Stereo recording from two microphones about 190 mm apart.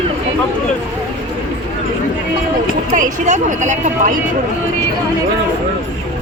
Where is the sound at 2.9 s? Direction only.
40° right (ahead or behind).